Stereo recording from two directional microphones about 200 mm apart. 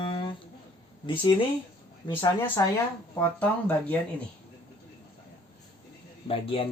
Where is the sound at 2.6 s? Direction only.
15° left (ahead or behind).